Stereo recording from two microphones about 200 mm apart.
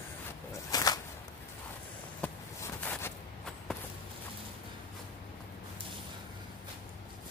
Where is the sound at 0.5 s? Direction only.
20° left (ahead or behind).